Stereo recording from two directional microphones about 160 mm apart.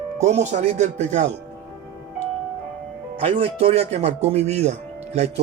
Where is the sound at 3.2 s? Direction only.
40° right (ahead or behind).